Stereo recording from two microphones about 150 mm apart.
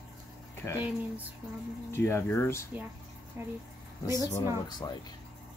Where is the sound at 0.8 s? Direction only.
10° right (ahead or behind).